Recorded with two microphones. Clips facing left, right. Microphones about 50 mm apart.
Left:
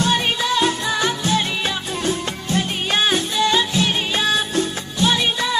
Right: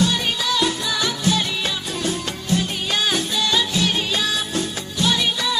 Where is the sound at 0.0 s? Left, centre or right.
Left.